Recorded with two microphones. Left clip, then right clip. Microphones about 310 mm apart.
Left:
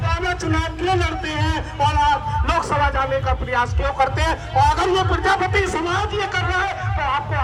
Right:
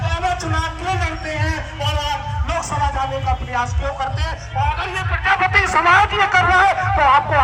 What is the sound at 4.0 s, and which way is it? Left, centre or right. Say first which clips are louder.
A man's voice: left 5 dB; left.